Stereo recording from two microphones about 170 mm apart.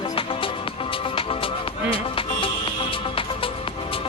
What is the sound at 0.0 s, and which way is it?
Music, 30° left (ahead or behind).